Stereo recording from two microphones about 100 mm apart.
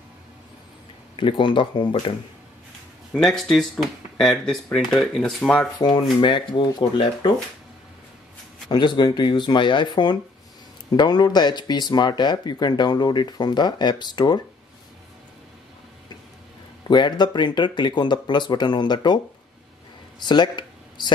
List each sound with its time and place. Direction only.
1.2 s speech: 60° left (ahead or behind)
3.1 s speech: 5° left (ahead or behind)
5.8 s speech: 45° left (ahead or behind)
8.6 s speech: 50° left (ahead or behind)
16.8 s speech: 45° left (ahead or behind)
20.2 s a sound: 50° left (ahead or behind)